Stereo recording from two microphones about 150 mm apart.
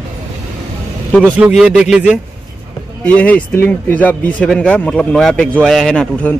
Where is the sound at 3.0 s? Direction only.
10° left (ahead or behind).